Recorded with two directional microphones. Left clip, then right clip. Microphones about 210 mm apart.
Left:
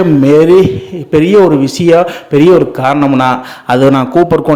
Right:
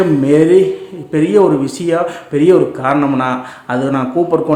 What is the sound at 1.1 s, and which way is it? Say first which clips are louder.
Speech: left 4 dB; 30° left (ahead or behind).